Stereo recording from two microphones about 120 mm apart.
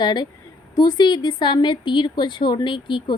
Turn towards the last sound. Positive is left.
turn(degrees=40)  # may be behind; listen again after turning